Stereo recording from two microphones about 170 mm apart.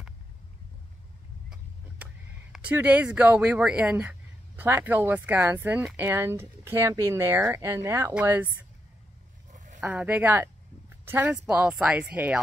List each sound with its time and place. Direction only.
2.5 s speech: 5° right (ahead or behind)
9.5 s a sound: 45° right (ahead or behind)
9.8 s speech: 10° right (ahead or behind)